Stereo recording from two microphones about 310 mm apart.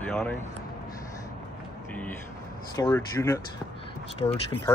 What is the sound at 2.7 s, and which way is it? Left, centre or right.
Speech, centre.